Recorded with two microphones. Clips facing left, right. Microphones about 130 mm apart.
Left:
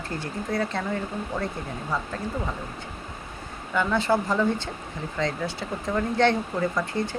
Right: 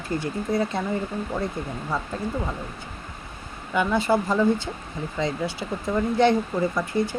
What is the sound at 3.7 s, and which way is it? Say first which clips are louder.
Speech: right 2 dB; 15° right (ahead or behind).